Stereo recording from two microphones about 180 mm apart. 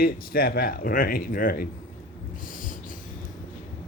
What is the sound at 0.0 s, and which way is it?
Speech, 55° left (ahead or behind).